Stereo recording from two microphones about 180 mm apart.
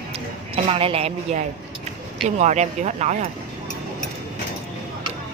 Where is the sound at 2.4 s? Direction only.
40° right (ahead or behind).